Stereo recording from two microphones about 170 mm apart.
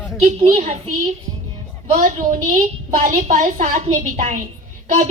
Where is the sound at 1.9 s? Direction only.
55° right (ahead or behind).